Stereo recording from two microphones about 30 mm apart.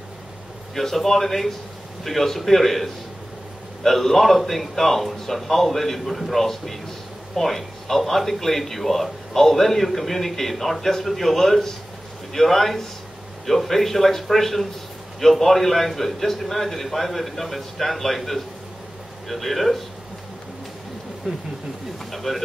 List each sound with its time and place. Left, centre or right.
0.7 s a man's voice: centre
21.2 s speech: centre
22.1 s pigeon: centre